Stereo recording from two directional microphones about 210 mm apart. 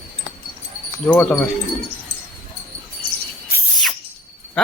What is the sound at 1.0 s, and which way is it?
Speech, 5° left (ahead or behind).